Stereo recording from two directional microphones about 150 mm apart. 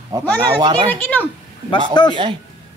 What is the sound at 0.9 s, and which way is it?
Speech, 10° left (ahead or behind).